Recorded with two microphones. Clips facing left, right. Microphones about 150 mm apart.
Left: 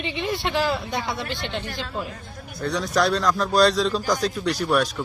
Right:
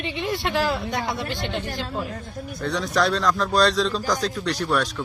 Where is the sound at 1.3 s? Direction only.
45° right (ahead or behind).